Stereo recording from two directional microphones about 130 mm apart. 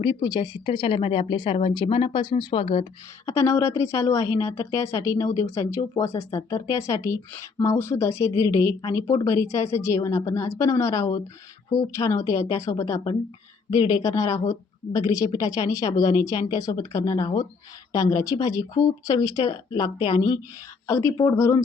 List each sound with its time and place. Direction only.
0.0 s speech: 35° left (ahead or behind)
3.2 s a woman's voice: 20° left (ahead or behind)